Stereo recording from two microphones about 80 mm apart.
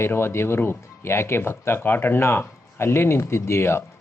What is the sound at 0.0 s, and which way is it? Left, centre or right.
A man's voice, left.